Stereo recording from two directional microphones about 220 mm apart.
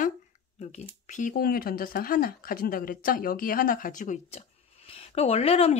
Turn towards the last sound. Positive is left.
turn(degrees=25)  # may be behind; listen again after turning